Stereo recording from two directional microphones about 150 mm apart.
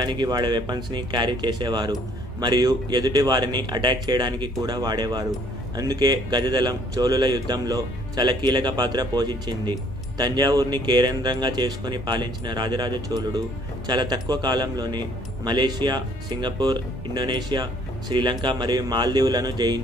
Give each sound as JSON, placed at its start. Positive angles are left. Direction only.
{"t": 0.0, "sound": "a man's voice", "side_deg": -30}